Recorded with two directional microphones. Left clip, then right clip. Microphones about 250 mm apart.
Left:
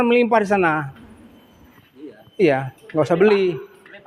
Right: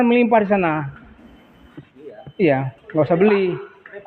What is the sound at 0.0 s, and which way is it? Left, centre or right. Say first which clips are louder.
Speech: right 1 dB; left.